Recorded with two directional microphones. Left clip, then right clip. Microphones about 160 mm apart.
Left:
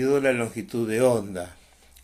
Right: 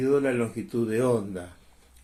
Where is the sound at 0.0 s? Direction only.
25° left (ahead or behind).